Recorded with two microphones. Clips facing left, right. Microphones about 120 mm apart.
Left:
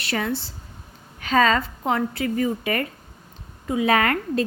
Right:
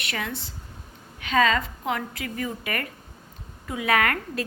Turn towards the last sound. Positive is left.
turn(degrees=30)  # may be behind; listen again after turning